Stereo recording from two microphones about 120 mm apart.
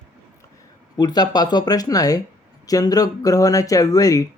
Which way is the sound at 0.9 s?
35° left (ahead or behind).